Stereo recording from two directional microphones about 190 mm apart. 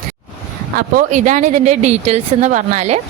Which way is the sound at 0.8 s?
45° right (ahead or behind).